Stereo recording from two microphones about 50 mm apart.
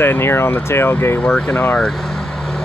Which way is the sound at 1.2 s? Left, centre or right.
Centre.